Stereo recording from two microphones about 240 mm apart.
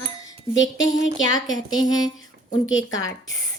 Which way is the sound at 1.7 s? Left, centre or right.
Centre.